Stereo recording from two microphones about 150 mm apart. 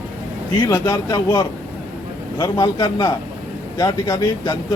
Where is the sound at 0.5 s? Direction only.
25° left (ahead or behind).